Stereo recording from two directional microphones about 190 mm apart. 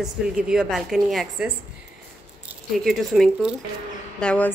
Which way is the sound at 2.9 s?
Centre (ahead or behind).